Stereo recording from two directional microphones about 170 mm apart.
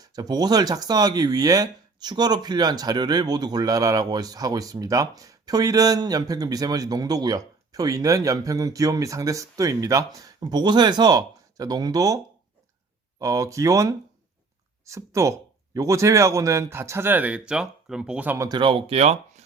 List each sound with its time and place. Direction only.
0.0 s speech: 25° right (ahead or behind)
18.4 s speech: 25° right (ahead or behind)